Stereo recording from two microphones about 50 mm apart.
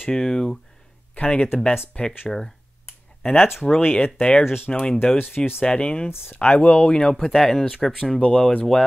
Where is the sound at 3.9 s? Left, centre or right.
Left; by 7.9 s centre.